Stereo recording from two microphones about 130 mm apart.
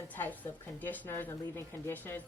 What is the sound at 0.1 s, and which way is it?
A woman's voice, 15° left (ahead or behind).